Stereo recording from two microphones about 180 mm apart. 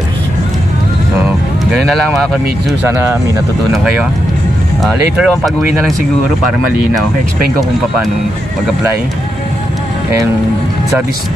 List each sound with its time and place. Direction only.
1.7 s speech: centre (ahead or behind)
3.7 s speech: 5° right (ahead or behind)